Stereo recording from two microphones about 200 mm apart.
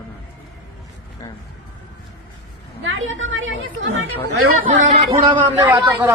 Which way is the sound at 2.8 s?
75° right (ahead or behind).